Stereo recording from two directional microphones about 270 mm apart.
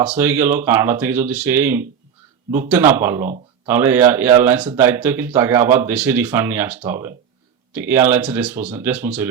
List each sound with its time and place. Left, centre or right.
0.0 s speech: centre
8.5 s speech: right
8.8 s speech: centre